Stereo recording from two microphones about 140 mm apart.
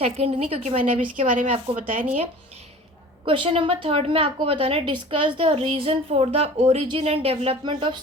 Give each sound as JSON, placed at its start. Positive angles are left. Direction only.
{"t": 0.0, "sound": "a woman's voice", "side_deg": -45}
{"t": 0.9, "sound": "a woman's voice", "side_deg": -65}
{"t": 1.5, "sound": "a woman's voice", "side_deg": -45}
{"t": 3.2, "sound": "a woman's voice", "side_deg": -40}